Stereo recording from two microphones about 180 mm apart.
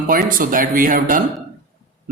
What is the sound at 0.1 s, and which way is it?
Speech, 50° right (ahead or behind).